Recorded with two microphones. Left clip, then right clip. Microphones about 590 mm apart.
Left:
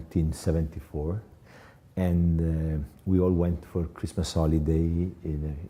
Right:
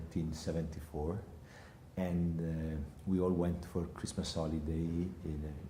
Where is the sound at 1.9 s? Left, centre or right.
Left.